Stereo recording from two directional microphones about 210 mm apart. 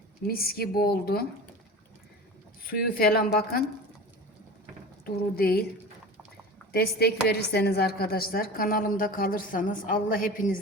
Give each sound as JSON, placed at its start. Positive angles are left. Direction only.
{"t": 0.3, "sound": "a woman's voice", "side_deg": 45}
{"t": 2.6, "sound": "a woman's voice", "side_deg": 45}
{"t": 5.0, "sound": "a woman's voice", "side_deg": 45}
{"t": 6.7, "sound": "a woman's voice", "side_deg": 50}